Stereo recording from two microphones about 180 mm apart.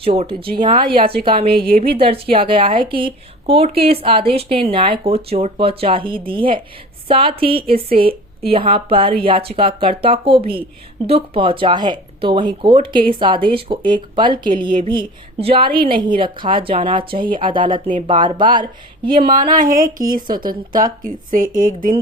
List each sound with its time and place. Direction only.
0.0 s speech: 30° right (ahead or behind)
1.5 s a woman's voice: 55° right (ahead or behind)
2.0 s speech: 30° right (ahead or behind)
19.2 s speech: 50° right (ahead or behind)
20.2 s speech: 25° right (ahead or behind)
21.0 s speech: 50° right (ahead or behind)